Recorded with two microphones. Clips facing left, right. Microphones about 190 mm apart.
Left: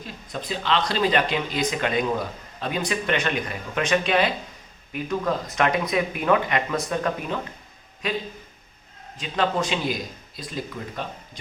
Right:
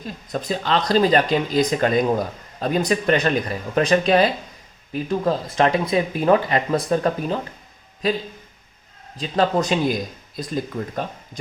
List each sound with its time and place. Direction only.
0.3 s speech: 45° right (ahead or behind)